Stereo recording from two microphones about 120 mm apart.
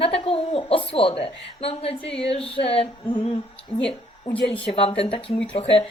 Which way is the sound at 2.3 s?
50° left (ahead or behind).